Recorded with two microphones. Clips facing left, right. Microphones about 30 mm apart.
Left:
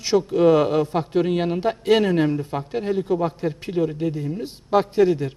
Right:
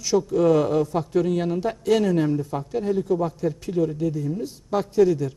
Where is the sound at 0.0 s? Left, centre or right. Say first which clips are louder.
Left 2 dB; left.